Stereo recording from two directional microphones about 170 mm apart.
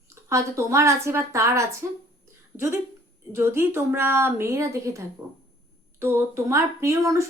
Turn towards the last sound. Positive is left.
turn(degrees=-20)  # may be behind; listen again after turning